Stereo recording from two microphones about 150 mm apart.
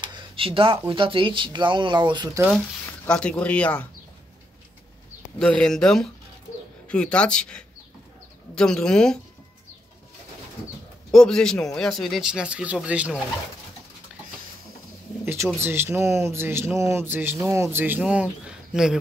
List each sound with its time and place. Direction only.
0.0 s speech: 35° right (ahead or behind)
3.1 s speech: 5° left (ahead or behind)
5.4 s speech: 5° left (ahead or behind)
11.1 s speech: 5° left (ahead or behind)
15.2 s speech: 15° right (ahead or behind)